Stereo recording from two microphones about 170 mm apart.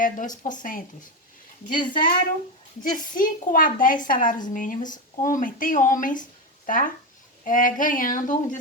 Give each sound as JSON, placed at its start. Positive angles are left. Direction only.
{"t": 0.0, "sound": "speech", "side_deg": 50}
{"t": 1.9, "sound": "speech", "side_deg": 55}